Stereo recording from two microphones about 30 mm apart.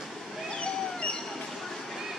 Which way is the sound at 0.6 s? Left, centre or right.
Left.